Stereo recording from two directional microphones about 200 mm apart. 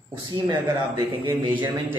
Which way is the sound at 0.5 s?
25° right (ahead or behind).